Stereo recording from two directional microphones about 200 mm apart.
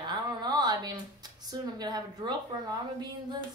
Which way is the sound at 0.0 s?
20° right (ahead or behind).